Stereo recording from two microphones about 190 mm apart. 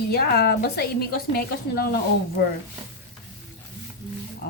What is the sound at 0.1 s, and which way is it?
A woman's voice, 55° left (ahead or behind).